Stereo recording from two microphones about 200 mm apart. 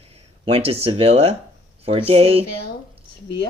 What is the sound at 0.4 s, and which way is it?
Speech, 30° right (ahead or behind).